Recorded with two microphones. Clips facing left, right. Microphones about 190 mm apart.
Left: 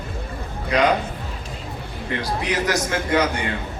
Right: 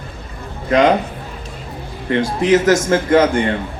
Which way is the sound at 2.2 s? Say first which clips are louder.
Right 10 dB; 50° right (ahead or behind).